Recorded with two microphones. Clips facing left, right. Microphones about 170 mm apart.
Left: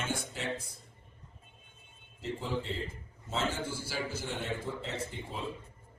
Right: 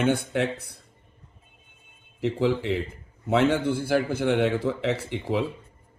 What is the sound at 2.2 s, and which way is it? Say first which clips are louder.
A man's voice: right 12 dB; 70° right (ahead or behind).